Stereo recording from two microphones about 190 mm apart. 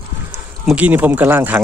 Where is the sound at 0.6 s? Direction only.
5° right (ahead or behind).